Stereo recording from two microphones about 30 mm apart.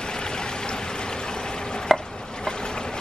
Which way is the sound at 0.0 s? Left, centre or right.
Left.